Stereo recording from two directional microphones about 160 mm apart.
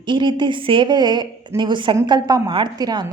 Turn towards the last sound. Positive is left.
turn(degrees=-25)  # may be behind; listen again after turning